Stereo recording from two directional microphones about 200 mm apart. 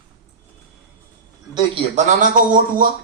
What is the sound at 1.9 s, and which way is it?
Speech, 40° right (ahead or behind).